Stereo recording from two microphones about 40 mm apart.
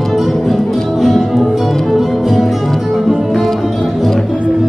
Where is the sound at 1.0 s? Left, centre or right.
Centre.